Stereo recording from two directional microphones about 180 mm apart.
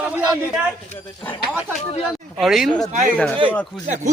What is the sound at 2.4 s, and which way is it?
A man's voice, centre (ahead or behind).